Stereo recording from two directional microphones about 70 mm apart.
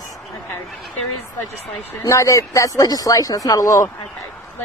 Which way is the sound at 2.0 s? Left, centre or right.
Left.